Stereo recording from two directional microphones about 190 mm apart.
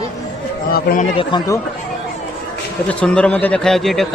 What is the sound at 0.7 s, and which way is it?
Speech, 50° left (ahead or behind).